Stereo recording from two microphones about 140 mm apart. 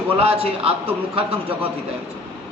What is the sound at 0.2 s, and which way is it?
Speech, 45° right (ahead or behind).